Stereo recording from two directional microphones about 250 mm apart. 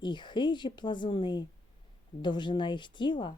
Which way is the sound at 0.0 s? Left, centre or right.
Centre.